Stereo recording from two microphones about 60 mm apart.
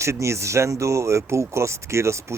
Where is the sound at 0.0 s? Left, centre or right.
Right.